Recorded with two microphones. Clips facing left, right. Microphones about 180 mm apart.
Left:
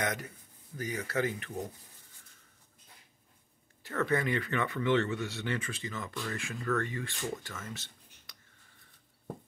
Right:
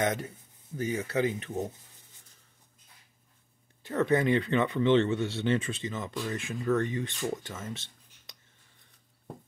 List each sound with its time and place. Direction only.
0.0 s speech: 25° right (ahead or behind)
3.8 s speech: 20° right (ahead or behind)